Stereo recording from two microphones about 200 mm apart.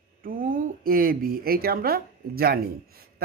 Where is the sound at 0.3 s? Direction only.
45° right (ahead or behind).